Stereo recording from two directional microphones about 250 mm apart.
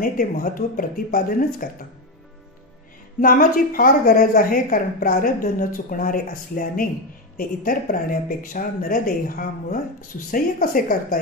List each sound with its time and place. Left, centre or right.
0.0 s a woman's voice: left
3.2 s a woman's voice: left